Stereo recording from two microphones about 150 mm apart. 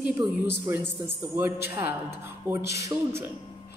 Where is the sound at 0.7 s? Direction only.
15° right (ahead or behind).